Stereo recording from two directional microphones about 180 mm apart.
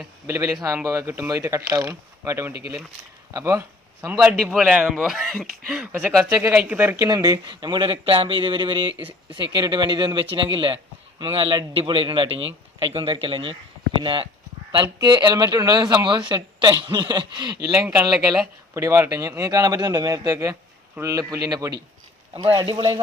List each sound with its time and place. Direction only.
0.3 s a man's voice: 15° right (ahead or behind)
17.7 s a man's voice: 10° right (ahead or behind); by 23.0 s 25° right (ahead or behind)